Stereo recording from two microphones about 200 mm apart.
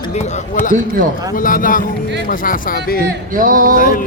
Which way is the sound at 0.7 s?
45° right (ahead or behind).